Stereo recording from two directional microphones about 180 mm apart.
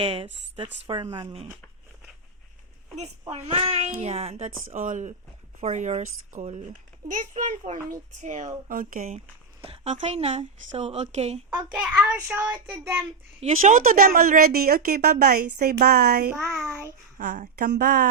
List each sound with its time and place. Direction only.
0.0 s a child's voice: 30° right (ahead or behind)
2.9 s a child's voice: 35° right (ahead or behind)
9.6 s a child's voice: 30° right (ahead or behind)
11.7 s a child's voice: 5° right (ahead or behind)
13.4 s speech: 45° right (ahead or behind); by 16.3 s 60° right (ahead or behind)
17.3 s a child's voice: 45° right (ahead or behind)
17.7 s speech: 65° right (ahead or behind)